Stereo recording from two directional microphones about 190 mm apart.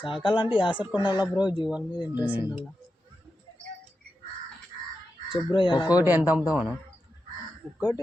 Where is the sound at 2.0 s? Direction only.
10° right (ahead or behind).